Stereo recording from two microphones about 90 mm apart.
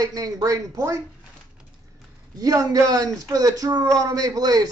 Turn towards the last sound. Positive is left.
turn(degrees=-45)  # may be behind; listen again after turning